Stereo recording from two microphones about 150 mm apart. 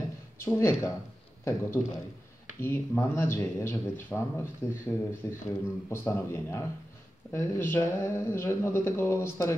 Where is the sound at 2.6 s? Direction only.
15° left (ahead or behind).